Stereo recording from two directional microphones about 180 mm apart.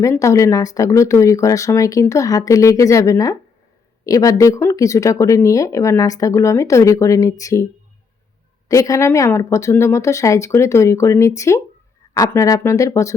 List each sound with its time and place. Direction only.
0.0 s speech: 15° left (ahead or behind)
8.7 s speech: 15° left (ahead or behind)